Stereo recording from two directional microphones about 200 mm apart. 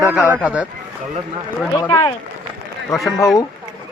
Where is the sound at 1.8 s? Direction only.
20° left (ahead or behind).